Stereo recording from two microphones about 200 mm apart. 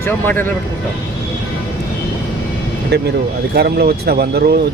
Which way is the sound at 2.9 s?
55° right (ahead or behind).